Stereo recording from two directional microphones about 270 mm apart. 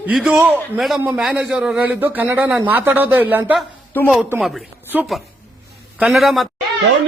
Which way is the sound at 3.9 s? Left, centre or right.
Centre.